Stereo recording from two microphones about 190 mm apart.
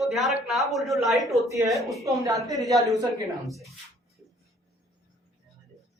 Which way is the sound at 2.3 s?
Centre (ahead or behind).